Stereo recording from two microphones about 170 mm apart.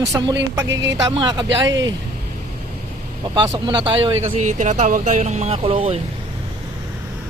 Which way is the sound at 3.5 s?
30° right (ahead or behind).